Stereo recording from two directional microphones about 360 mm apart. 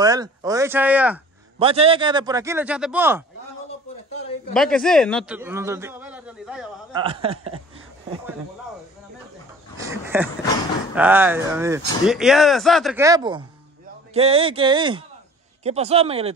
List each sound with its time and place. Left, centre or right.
0.0 s a man's voice: centre
1.6 s a man's voice: centre
4.6 s a man's voice: centre
7.0 s a man's voice: centre
9.8 s a sound: centre
11.0 s a man's voice: centre